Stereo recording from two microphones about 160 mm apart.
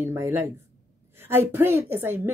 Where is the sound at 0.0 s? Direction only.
15° right (ahead or behind).